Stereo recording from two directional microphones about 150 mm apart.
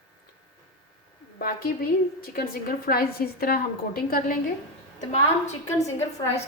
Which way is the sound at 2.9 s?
80° left.